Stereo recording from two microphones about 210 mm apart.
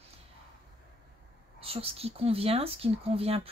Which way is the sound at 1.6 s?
25° right (ahead or behind).